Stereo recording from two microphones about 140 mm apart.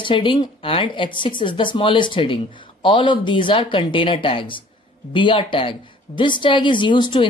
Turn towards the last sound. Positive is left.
turn(degrees=35)  # may be behind; listen again after turning